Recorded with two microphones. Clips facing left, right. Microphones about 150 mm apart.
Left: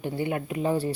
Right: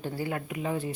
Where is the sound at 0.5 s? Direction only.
35° left (ahead or behind).